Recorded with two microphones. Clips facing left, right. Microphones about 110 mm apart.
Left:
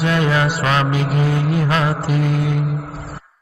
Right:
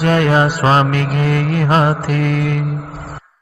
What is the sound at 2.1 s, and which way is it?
Mantra, 55° right (ahead or behind).